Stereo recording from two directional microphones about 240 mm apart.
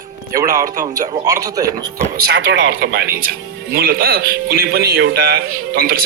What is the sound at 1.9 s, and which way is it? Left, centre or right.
Speech, right.